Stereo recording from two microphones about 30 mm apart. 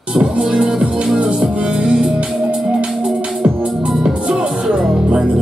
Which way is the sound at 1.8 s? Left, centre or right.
Right.